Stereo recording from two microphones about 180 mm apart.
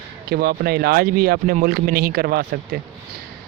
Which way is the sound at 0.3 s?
60° right (ahead or behind).